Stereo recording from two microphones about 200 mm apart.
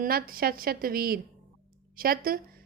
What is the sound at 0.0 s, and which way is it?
A woman's voice, 45° right (ahead or behind).